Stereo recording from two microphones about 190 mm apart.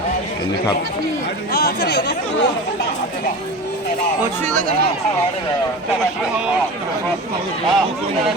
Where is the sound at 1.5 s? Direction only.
55° left (ahead or behind).